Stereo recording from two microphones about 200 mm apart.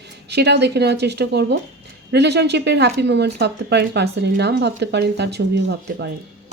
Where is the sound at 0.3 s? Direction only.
55° right (ahead or behind).